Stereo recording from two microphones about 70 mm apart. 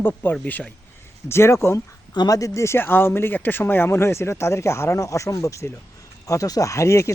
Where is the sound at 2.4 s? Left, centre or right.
Left.